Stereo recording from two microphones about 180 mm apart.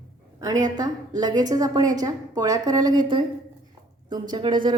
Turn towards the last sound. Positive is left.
turn(degrees=-25)  # may be behind; listen again after turning